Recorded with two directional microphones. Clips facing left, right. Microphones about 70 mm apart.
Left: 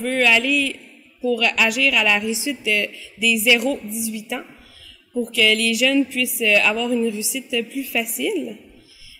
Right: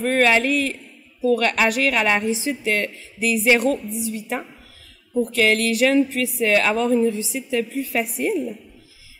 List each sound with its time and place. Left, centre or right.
0.0 s speech: right